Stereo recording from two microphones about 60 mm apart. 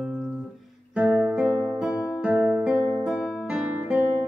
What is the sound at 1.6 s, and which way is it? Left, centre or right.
Music, centre.